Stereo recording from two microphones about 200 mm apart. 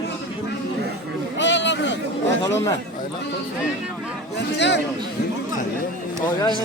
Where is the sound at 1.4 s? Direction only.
65° left (ahead or behind).